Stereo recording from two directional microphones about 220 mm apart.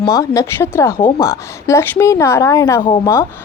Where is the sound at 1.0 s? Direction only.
20° left (ahead or behind).